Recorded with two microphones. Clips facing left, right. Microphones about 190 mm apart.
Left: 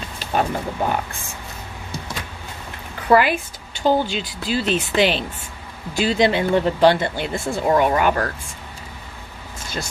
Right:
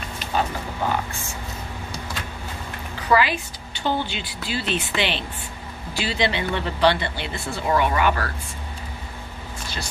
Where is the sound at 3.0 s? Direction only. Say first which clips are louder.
Left 4 dB; 55° left (ahead or behind).